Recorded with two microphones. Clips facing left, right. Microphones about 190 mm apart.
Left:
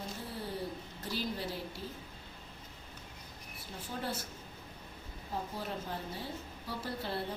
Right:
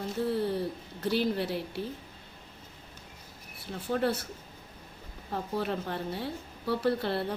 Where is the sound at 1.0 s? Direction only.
65° right (ahead or behind).